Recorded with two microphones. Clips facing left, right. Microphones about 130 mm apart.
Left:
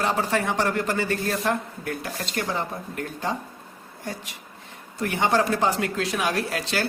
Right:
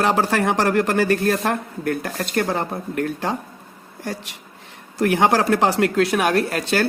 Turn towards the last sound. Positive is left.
turn(degrees=-55)  # may be behind; listen again after turning